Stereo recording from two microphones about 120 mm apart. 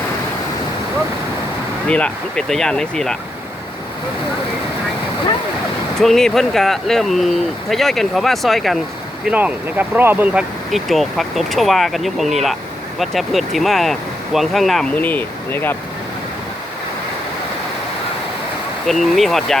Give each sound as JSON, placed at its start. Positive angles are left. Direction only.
{"t": 1.9, "sound": "speech", "side_deg": 10}
{"t": 6.0, "sound": "speech", "side_deg": 5}
{"t": 9.2, "sound": "speech", "side_deg": -15}
{"t": 10.7, "sound": "speech", "side_deg": 0}
{"t": 14.9, "sound": "speech", "side_deg": 15}
{"t": 18.9, "sound": "speech", "side_deg": 0}